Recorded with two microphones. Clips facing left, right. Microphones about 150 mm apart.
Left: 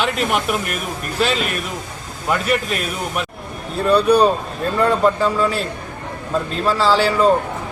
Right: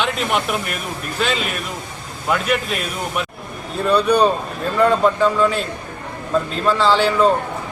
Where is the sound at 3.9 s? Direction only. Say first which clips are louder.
Left 2 dB; 35° left (ahead or behind).